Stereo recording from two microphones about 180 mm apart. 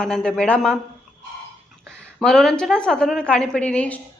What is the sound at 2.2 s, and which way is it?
A woman's voice, centre (ahead or behind).